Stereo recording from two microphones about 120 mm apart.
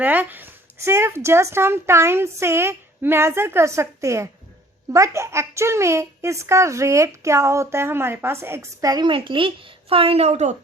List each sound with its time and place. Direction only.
0.0 s speech: 15° right (ahead or behind); by 9.0 s 30° right (ahead or behind)
9.0 s speech: 45° right (ahead or behind); by 10.6 s 75° right (ahead or behind)